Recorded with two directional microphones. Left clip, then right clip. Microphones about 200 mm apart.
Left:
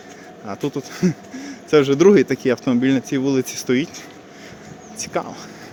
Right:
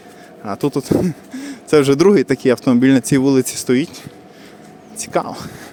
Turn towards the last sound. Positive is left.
turn(degrees=-30)  # may be behind; listen again after turning